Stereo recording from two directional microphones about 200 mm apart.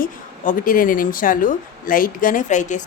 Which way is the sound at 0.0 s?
45° left (ahead or behind).